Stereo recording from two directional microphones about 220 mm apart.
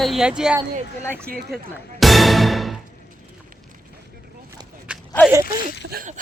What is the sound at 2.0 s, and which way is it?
Music, centre (ahead or behind).